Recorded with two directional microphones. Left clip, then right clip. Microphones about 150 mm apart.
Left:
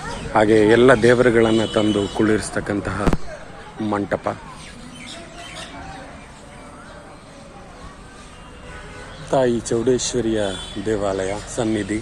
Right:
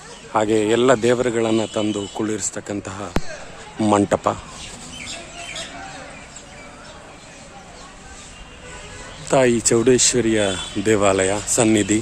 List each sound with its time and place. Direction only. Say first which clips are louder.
0.3 s a man's voice: left 4 dB; 50° right (ahead or behind)
9.3 s speech: right 2 dB; 55° right (ahead or behind)